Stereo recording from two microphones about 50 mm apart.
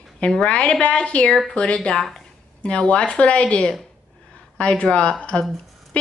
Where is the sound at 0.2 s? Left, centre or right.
Centre.